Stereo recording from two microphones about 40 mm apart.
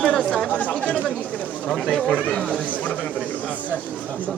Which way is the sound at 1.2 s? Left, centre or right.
Left.